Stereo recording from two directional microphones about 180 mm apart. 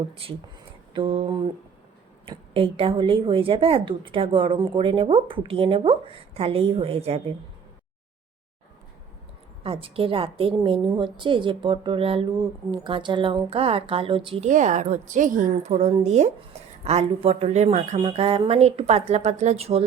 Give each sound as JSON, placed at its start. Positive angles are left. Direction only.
{"t": 0.9, "sound": "a woman's voice", "side_deg": -30}
{"t": 9.6, "sound": "a woman's voice", "side_deg": -30}
{"t": 14.5, "sound": "a woman's voice", "side_deg": -45}